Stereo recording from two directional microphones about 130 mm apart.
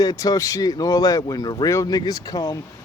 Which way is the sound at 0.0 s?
30° left (ahead or behind).